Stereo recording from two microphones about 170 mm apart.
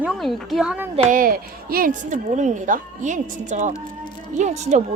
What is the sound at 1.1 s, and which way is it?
A woman's voice, 55° right (ahead or behind).